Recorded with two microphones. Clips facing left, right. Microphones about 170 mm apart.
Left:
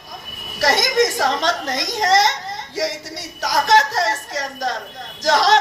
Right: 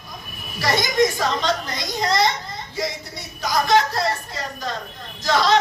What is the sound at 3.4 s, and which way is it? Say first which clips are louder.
A woman's voice: left 2 dB; 90° left.